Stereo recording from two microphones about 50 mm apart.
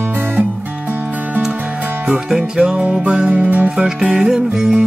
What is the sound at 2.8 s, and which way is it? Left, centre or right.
Music, right.